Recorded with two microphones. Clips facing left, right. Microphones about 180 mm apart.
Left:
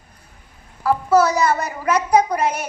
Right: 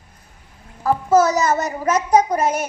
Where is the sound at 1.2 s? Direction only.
45° right (ahead or behind).